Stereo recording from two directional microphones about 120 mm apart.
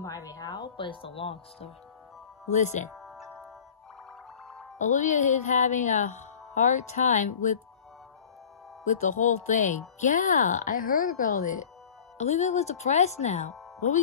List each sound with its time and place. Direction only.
0.0 s speech: 30° left (ahead or behind); by 1.7 s 50° left (ahead or behind)
2.5 s speech: 80° left
2.9 s music: centre (ahead or behind)
4.7 s speech: 90° left
8.8 s speech: 90° left
12.2 s a woman's voice: 70° left (ahead or behind)